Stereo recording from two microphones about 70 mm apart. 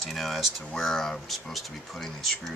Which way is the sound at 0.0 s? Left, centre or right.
Centre.